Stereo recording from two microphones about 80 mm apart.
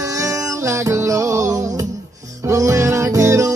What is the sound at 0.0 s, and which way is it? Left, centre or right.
Music, right.